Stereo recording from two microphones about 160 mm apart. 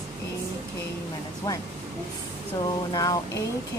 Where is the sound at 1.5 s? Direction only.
20° left (ahead or behind).